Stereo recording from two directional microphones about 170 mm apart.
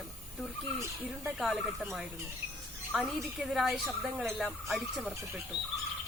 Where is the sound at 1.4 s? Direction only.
Centre (ahead or behind).